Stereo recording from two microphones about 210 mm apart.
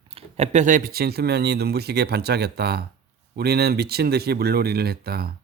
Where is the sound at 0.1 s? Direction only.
30° right (ahead or behind).